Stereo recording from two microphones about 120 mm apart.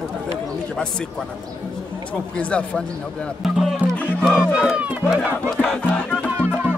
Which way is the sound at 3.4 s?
Centre (ahead or behind).